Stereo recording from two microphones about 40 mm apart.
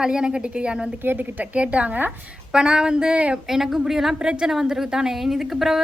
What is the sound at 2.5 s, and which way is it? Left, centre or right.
Speech, right.